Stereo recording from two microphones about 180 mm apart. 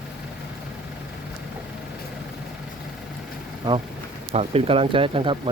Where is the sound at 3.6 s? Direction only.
20° right (ahead or behind).